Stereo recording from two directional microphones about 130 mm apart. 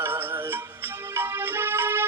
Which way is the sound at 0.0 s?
15° right (ahead or behind).